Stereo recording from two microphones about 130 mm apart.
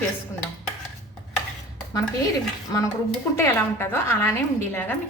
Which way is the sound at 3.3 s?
20° left (ahead or behind).